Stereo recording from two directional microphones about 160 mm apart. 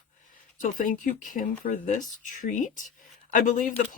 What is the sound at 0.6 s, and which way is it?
Speech, 55° left (ahead or behind).